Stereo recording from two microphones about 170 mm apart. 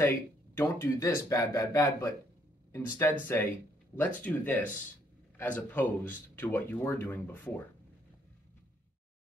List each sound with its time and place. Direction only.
0.6 s speech: 15° left (ahead or behind)